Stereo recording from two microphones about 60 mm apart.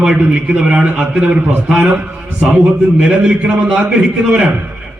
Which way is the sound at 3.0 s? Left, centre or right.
Centre.